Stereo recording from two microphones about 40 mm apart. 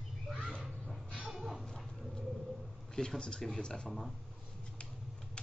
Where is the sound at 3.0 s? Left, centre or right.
Centre.